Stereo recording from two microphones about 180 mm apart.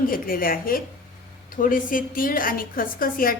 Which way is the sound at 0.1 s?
50° left (ahead or behind).